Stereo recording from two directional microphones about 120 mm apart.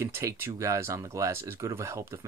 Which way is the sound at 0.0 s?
25° right (ahead or behind).